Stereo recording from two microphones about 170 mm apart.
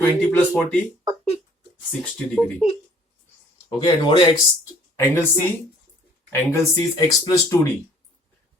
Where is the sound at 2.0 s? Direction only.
5° left (ahead or behind).